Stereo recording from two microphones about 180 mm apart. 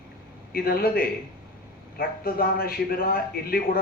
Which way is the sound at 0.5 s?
55° left (ahead or behind).